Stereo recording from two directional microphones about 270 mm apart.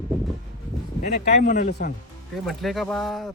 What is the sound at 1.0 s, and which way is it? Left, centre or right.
Speech, left.